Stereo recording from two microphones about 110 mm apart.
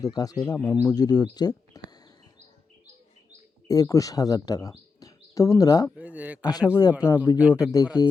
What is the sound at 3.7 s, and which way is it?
Speech, 30° left (ahead or behind).